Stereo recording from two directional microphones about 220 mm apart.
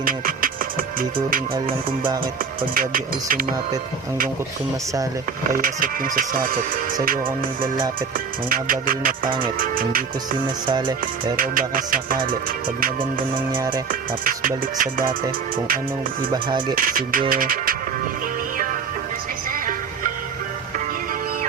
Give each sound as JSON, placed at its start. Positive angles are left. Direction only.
{"t": 0.0, "sound": "music", "side_deg": -40}
{"t": 2.6, "sound": "speech", "side_deg": -40}
{"t": 5.5, "sound": "speech", "side_deg": -40}
{"t": 8.4, "sound": "speech", "side_deg": -40}
{"t": 10.7, "sound": "speech", "side_deg": -20}
{"t": 11.3, "sound": "speech", "side_deg": -40}
{"t": 13.5, "sound": "speech", "side_deg": -20}
{"t": 14.3, "sound": "speech", "side_deg": -35}
{"t": 16.3, "sound": "speech", "side_deg": -20}
{"t": 16.7, "sound": "speech", "side_deg": -40}